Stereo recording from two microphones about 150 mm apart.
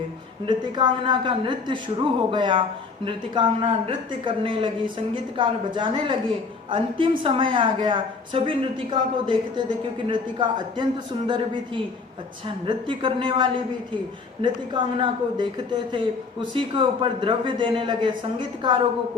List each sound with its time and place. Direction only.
0.4 s a woman's voice: 30° right (ahead or behind)
12.6 s a woman's voice: 35° right (ahead or behind)